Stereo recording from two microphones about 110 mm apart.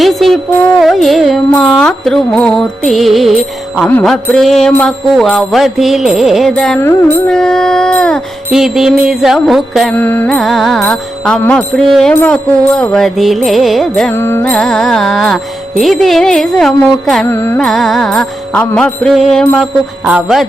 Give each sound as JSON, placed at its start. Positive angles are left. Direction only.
{"t": 0.0, "sound": "music", "side_deg": 0}
{"t": 8.4, "sound": "music", "side_deg": -5}
{"t": 9.9, "sound": "music", "side_deg": 15}
{"t": 10.2, "sound": "music", "side_deg": 5}
{"t": 12.1, "sound": "music", "side_deg": 10}
{"t": 14.1, "sound": "carnatic music", "side_deg": 20}
{"t": 14.4, "sound": "music", "side_deg": 5}
{"t": 17.2, "sound": "carnatic music", "side_deg": 20}
{"t": 17.6, "sound": "music", "side_deg": 0}
{"t": 20.1, "sound": "music", "side_deg": -10}